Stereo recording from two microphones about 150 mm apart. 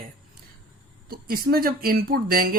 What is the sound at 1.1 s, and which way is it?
Speech, 80° right.